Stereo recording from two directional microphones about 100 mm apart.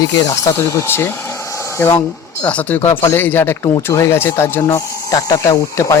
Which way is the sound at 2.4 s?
15° left (ahead or behind).